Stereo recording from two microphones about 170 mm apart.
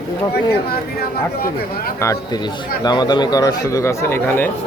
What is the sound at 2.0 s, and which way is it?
A man's voice, 15° left (ahead or behind).